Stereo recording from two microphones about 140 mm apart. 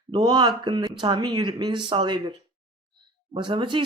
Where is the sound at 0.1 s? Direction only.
30° right (ahead or behind).